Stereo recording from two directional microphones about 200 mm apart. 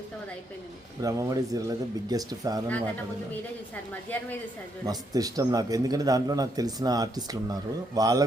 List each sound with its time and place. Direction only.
1.0 s speech: 15° right (ahead or behind)
4.1 s a woman's voice: 10° left (ahead or behind)
4.9 s a man's voice: 20° right (ahead or behind)